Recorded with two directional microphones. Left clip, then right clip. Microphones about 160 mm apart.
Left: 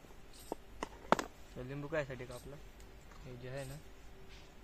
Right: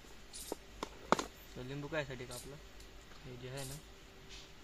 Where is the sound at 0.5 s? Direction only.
15° left (ahead or behind).